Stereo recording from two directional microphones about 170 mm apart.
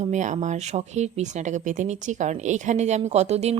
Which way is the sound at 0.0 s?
45° right (ahead or behind).